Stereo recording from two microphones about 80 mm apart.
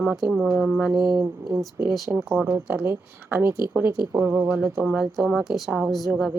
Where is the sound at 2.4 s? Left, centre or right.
Right.